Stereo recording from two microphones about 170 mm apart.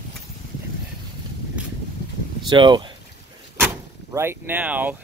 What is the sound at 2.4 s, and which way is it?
Speech, 25° right (ahead or behind).